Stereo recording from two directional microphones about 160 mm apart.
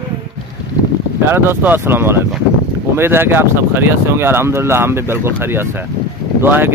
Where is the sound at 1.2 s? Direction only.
15° right (ahead or behind).